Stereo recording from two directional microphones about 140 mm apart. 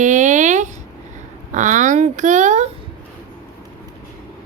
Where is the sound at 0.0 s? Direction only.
60° right (ahead or behind).